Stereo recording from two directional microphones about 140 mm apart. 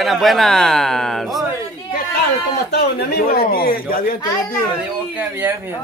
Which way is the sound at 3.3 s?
90° left.